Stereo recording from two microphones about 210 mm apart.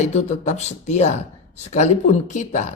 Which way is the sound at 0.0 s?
35° left (ahead or behind).